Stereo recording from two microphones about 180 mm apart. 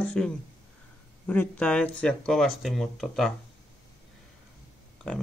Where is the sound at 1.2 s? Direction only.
10° left (ahead or behind).